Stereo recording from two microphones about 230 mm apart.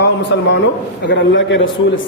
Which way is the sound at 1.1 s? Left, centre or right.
Left.